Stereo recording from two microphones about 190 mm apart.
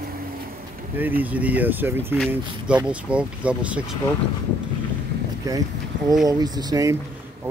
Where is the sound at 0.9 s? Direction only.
10° right (ahead or behind).